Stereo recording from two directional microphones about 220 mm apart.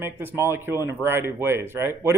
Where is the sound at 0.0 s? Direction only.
10° right (ahead or behind).